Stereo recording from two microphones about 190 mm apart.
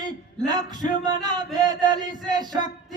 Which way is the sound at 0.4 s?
20° right (ahead or behind).